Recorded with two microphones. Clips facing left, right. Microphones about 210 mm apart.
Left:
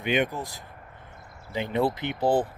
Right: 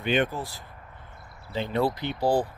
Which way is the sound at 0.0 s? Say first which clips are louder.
Even; 15° left (ahead or behind).